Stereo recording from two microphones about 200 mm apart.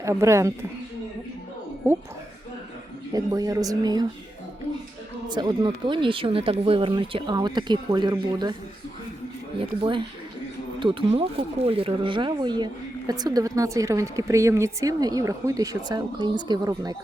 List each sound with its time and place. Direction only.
0.0 s speech: 15° right (ahead or behind)
3.1 s speech: 15° right (ahead or behind)
5.3 s speech: 20° right (ahead or behind)
9.6 s speech: 25° right (ahead or behind)